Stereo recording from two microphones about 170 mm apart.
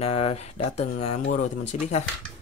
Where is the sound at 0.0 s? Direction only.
35° left (ahead or behind).